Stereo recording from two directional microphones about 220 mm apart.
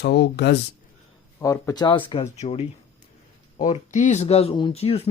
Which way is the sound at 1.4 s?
15° left (ahead or behind).